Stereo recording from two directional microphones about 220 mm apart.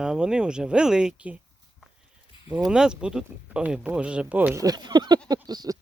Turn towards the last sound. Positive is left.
turn(degrees=-20)  # may be behind; listen again after turning